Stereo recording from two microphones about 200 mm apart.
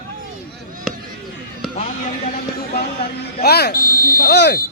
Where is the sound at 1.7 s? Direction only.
40° left (ahead or behind).